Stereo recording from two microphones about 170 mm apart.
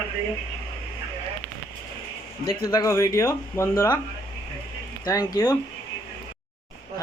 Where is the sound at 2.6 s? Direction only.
20° left (ahead or behind).